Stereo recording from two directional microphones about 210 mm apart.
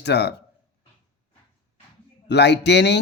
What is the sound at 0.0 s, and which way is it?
Speech, 55° left (ahead or behind).